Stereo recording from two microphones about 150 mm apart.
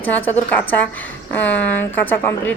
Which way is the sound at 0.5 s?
10° left (ahead or behind).